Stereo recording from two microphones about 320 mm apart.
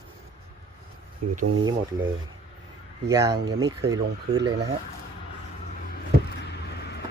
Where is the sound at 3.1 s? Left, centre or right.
Centre.